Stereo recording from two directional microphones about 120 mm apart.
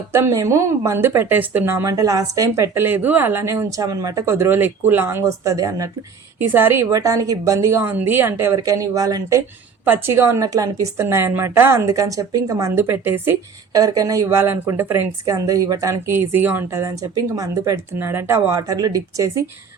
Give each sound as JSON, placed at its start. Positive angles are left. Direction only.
{"t": 0.1, "sound": "speech", "side_deg": -25}
{"t": 6.5, "sound": "speech", "side_deg": -20}
{"t": 13.7, "sound": "speech", "side_deg": -30}